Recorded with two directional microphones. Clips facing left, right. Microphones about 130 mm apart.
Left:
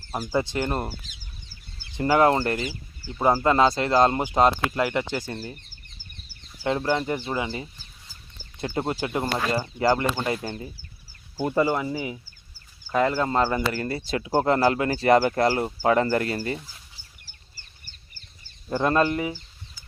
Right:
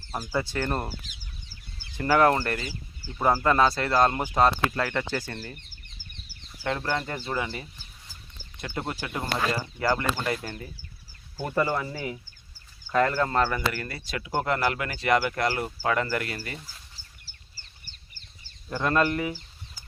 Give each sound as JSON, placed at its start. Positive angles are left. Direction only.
{"t": 0.3, "sound": "speech", "side_deg": 20}
{"t": 2.0, "sound": "speech", "side_deg": 20}
{"t": 6.6, "sound": "speech", "side_deg": 20}
{"t": 17.2, "sound": "chicken", "side_deg": 50}
{"t": 18.7, "sound": "speech", "side_deg": 25}